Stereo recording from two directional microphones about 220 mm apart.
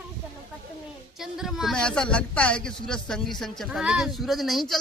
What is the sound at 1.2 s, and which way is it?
A woman's voice, centre (ahead or behind).